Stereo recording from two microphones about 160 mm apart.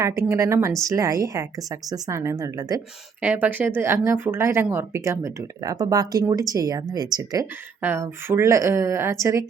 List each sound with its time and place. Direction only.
0.0 s a woman's voice: 20° right (ahead or behind)
3.2 s a woman's voice: 10° right (ahead or behind)